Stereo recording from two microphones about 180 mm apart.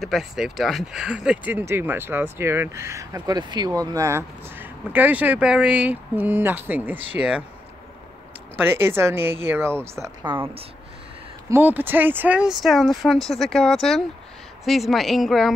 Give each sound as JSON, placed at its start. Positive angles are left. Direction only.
{"t": 0.0, "sound": "speech", "side_deg": 0}
{"t": 8.5, "sound": "speech", "side_deg": -10}
{"t": 10.0, "sound": "a woman's voice", "side_deg": -25}
{"t": 11.4, "sound": "speech", "side_deg": -10}